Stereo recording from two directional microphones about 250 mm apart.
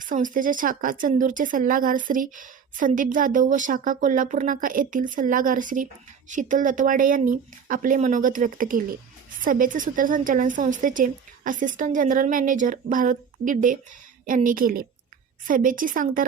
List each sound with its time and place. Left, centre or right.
0.0 s speech: right